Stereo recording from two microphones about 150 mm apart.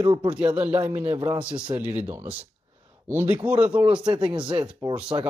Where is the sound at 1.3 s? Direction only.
35° right (ahead or behind).